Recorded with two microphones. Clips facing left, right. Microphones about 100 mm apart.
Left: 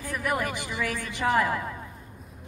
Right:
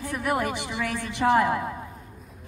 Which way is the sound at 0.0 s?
20° right (ahead or behind).